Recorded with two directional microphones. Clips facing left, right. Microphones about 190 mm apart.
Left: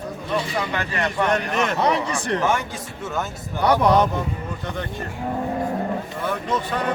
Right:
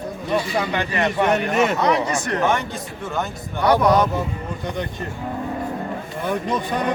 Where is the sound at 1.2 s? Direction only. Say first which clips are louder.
Right 3 dB; 5° right (ahead or behind).